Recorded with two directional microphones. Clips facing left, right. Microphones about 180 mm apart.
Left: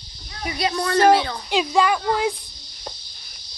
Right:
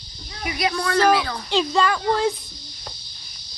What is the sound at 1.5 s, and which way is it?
Speech, 10° left (ahead or behind).